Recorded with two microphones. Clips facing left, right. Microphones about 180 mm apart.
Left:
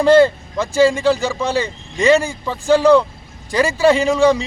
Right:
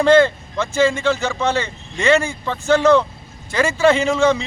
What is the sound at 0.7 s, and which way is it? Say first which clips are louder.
Speech: left 4 dB; 35° left (ahead or behind).